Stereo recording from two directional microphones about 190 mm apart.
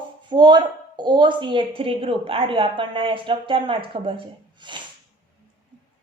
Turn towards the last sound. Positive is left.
turn(degrees=-25)  # may be behind; listen again after turning